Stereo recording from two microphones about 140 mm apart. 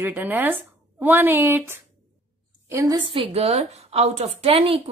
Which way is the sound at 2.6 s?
25° right (ahead or behind).